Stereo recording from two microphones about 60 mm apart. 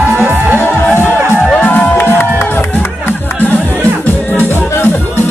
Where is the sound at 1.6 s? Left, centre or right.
Left.